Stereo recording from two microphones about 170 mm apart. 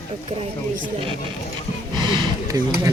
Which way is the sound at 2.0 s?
25° right (ahead or behind).